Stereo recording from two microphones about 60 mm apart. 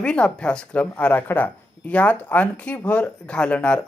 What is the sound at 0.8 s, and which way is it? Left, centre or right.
Speech, left.